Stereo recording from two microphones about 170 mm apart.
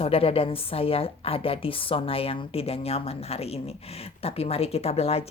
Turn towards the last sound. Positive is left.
turn(degrees=35)  # may be behind; listen again after turning